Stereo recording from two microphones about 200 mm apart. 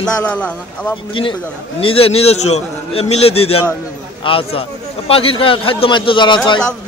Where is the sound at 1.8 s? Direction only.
30° left (ahead or behind).